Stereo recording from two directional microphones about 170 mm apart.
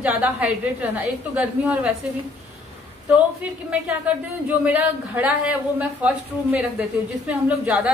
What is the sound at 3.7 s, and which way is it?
A woman's voice, 10° right (ahead or behind).